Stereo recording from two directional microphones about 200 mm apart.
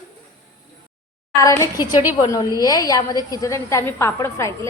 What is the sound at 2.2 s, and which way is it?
A woman's voice, 20° left (ahead or behind).